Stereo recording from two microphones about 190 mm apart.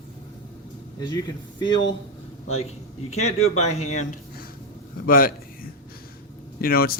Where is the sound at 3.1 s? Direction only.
35° left (ahead or behind).